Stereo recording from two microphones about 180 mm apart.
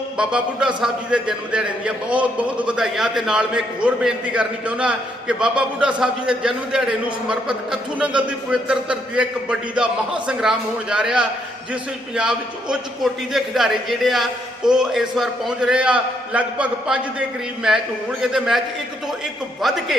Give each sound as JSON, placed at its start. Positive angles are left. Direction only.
{"t": 0.2, "sound": "a man's voice", "side_deg": -5}
{"t": 19.6, "sound": "a man's voice", "side_deg": 0}